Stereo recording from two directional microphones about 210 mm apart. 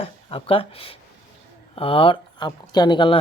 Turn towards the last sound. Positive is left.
turn(degrees=20)  # may be behind; listen again after turning